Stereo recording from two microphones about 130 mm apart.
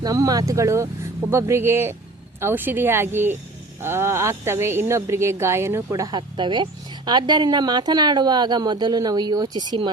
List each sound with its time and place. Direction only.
0.0 s a woman's voice: 30° right (ahead or behind)